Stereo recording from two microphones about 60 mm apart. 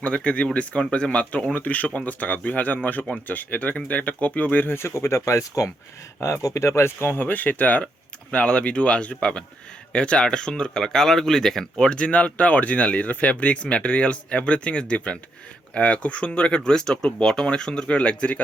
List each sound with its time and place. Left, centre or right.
0.0 s speech: centre